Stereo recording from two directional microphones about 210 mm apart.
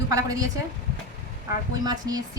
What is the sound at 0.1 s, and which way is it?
Speech, 15° right (ahead or behind).